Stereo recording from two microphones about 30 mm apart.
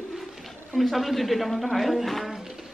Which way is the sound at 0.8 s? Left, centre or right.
Centre.